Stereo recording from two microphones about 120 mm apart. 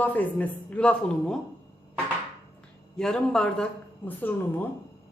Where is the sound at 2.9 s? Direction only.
5° left (ahead or behind).